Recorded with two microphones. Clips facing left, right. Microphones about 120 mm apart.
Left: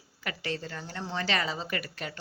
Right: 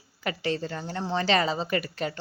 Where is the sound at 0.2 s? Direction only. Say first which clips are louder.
Right 6 dB; 25° right (ahead or behind).